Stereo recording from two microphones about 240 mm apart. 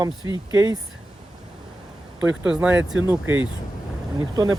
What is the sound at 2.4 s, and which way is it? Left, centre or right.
Speech, centre.